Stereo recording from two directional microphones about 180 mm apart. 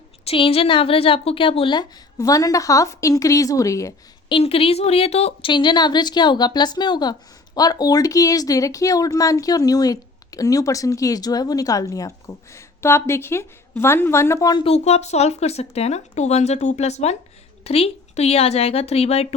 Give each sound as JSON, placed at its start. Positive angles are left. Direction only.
{"t": 0.3, "sound": "a woman's voice", "side_deg": 30}
{"t": 4.4, "sound": "a woman's voice", "side_deg": 30}
{"t": 14.7, "sound": "speech", "side_deg": 35}